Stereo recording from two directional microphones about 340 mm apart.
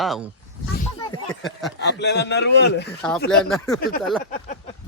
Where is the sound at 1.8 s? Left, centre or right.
Left.